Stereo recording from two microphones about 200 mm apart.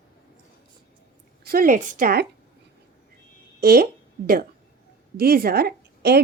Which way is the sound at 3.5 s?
50° right (ahead or behind).